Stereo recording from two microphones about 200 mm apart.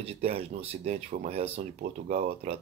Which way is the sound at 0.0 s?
30° right (ahead or behind).